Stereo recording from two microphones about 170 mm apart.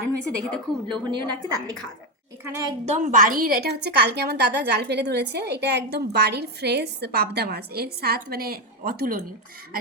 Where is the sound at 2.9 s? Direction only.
50° right (ahead or behind).